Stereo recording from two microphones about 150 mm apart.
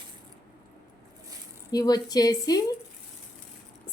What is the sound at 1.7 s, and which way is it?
Speech, 25° left (ahead or behind).